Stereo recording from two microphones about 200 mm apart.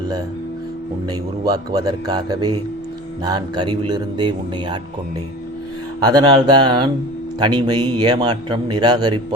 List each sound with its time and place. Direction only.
1.0 s a man's voice: 20° right (ahead or behind)
6.1 s a man's voice: 20° right (ahead or behind)